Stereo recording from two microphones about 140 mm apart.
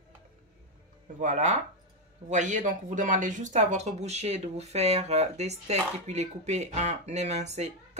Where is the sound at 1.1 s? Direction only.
60° right (ahead or behind).